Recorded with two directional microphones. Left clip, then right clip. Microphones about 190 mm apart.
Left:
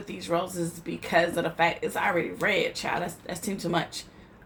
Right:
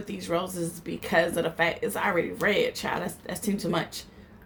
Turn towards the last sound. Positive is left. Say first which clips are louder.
# even
turn(degrees=-35)  # may be behind; listen again after turning